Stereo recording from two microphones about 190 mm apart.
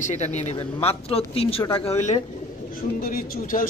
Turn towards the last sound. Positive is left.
turn(degrees=45)  # may be behind; listen again after turning